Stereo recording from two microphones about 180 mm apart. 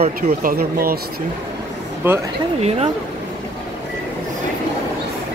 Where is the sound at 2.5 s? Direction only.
35° right (ahead or behind).